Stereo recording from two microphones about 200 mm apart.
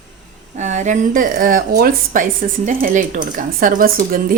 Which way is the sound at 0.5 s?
35° right (ahead or behind).